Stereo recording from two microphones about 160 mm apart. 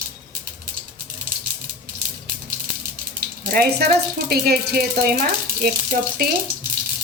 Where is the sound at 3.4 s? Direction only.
65° right (ahead or behind).